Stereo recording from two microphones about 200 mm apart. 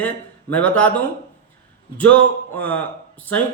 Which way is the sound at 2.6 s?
5° left (ahead or behind).